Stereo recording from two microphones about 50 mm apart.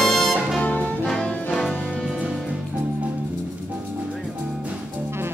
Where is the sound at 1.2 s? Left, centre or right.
Left.